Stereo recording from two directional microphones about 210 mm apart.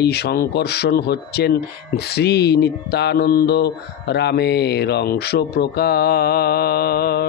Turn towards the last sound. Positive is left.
turn(degrees=45)  # may be behind; listen again after turning